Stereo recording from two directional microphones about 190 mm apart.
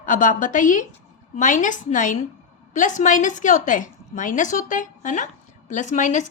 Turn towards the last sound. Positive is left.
turn(degrees=40)  # may be behind; listen again after turning